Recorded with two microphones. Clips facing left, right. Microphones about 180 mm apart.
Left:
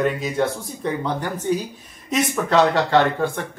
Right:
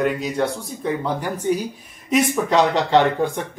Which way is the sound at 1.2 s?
10° right (ahead or behind).